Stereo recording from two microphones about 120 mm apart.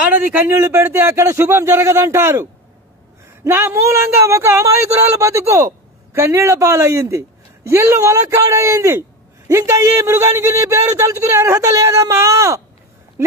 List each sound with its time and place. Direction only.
0.1 s speech: 15° right (ahead or behind)
3.5 s speech: 20° right (ahead or behind)